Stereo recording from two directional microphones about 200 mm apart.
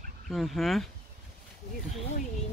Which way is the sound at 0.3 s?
Centre (ahead or behind).